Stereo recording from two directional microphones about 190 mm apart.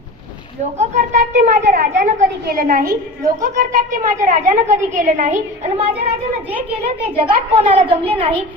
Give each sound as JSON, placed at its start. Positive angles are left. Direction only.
{"t": 0.7, "sound": "a woman's voice", "side_deg": -40}
{"t": 2.8, "sound": "a woman's voice", "side_deg": -15}
{"t": 3.4, "sound": "a woman's voice", "side_deg": -40}